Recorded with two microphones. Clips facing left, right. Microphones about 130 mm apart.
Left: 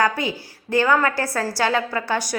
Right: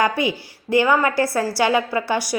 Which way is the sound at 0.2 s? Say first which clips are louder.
Right 4 dB; 15° right (ahead or behind).